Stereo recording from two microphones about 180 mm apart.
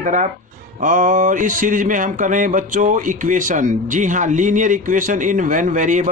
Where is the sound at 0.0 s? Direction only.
45° right (ahead or behind).